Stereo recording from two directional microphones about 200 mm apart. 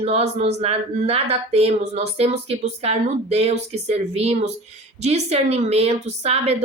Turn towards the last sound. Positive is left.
turn(degrees=-30)  # may be behind; listen again after turning